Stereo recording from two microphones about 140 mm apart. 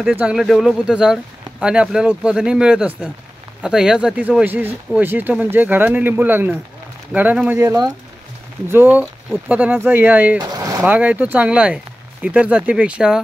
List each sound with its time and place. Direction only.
0.1 s speech: 10° right (ahead or behind)
10.5 s a sound: 25° right (ahead or behind)
10.9 s speech: 10° right (ahead or behind)